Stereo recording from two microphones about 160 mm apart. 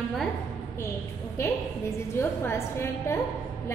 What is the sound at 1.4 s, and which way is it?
A woman's voice, 15° left (ahead or behind).